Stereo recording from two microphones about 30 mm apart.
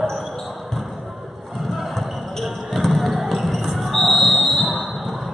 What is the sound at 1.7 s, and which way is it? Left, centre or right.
Basketball bounce, centre.